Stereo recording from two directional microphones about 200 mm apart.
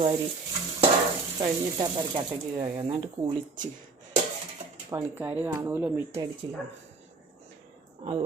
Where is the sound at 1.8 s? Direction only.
25° right (ahead or behind).